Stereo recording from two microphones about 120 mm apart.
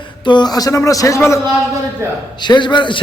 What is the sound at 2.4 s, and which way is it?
Speech, 40° left (ahead or behind).